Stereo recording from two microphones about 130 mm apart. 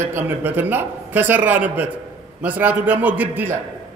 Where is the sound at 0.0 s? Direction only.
20° right (ahead or behind).